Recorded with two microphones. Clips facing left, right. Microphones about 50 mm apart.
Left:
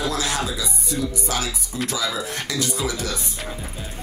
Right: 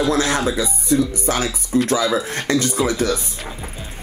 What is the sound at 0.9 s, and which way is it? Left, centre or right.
Speech, right.